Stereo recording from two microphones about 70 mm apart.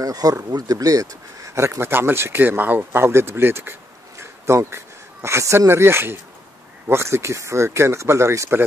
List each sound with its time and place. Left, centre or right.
0.0 s speech: right